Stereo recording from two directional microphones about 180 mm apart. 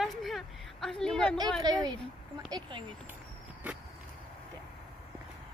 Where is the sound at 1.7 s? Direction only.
20° right (ahead or behind).